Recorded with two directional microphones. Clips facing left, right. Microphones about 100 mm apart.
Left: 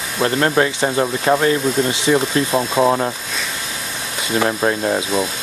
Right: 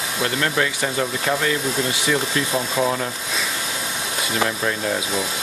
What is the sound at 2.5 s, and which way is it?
Speech, 60° left (ahead or behind).